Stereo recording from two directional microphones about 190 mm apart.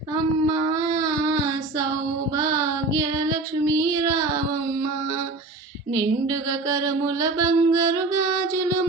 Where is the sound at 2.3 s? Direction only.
15° right (ahead or behind).